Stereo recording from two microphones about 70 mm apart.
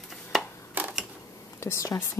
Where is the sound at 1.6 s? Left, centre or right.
Left.